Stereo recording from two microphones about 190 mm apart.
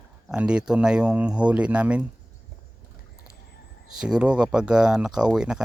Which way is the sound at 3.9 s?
5° right (ahead or behind).